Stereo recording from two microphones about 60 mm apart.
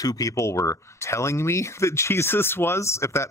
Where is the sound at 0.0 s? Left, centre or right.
Left.